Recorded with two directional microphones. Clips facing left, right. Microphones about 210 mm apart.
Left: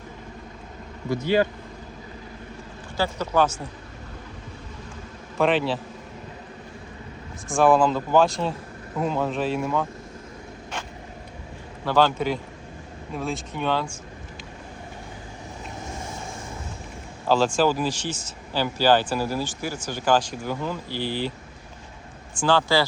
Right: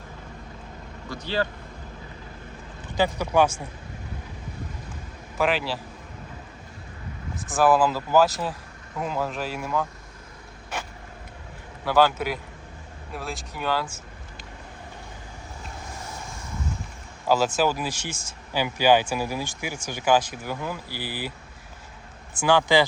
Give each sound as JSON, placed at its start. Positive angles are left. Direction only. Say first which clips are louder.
{"t": 1.1, "sound": "speech", "louder": "left 7 dB", "side_deg": 15}
{"t": 3.0, "sound": "speech", "louder": "right 1 dB", "side_deg": -15}
{"t": 5.4, "sound": "speech", "louder": "left 3 dB", "side_deg": 0}
{"t": 7.5, "sound": "speech", "louder": "left 2 dB", "side_deg": -5}
{"t": 11.9, "sound": "speech", "louder": "even", "side_deg": -10}
{"t": 17.2, "sound": "speech", "louder": "left 2 dB", "side_deg": -5}
{"t": 22.4, "sound": "speech", "louder": "right 1 dB", "side_deg": -15}